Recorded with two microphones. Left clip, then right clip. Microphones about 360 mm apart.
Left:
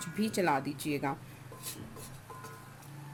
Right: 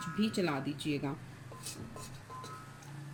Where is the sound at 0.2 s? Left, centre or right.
Centre.